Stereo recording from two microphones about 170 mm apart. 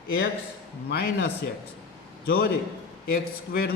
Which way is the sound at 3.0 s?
60° left (ahead or behind).